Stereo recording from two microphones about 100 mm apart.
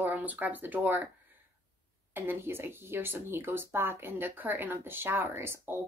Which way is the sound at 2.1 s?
20° right (ahead or behind).